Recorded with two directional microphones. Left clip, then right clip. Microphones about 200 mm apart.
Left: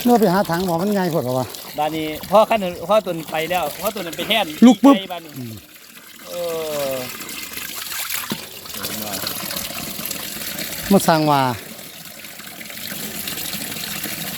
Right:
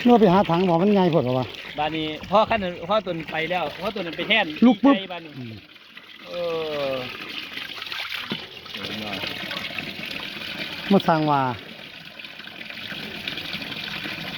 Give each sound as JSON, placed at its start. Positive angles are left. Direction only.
{"t": 0.1, "sound": "speech", "side_deg": 0}
{"t": 1.8, "sound": "speech", "side_deg": 50}
{"t": 6.3, "sound": "water", "side_deg": 45}
{"t": 10.9, "sound": "speech", "side_deg": 25}
{"t": 12.9, "sound": "water", "side_deg": 50}